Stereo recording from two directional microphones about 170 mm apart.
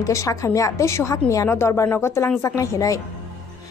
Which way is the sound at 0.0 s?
20° left (ahead or behind).